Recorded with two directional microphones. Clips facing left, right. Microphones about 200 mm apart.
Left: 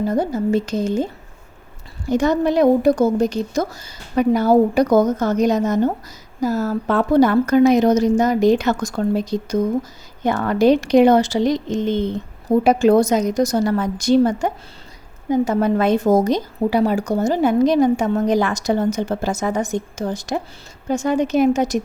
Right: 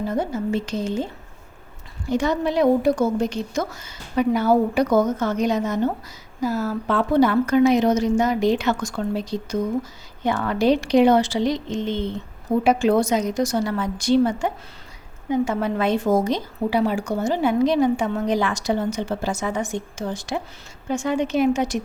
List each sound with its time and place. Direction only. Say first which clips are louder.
0.1 s a woman's voice: left 5 dB; 40° left (ahead or behind)
2.0 s a woman's voice: left 5 dB; 45° left (ahead or behind)